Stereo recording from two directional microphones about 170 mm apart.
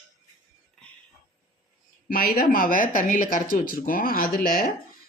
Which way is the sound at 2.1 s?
60° left (ahead or behind).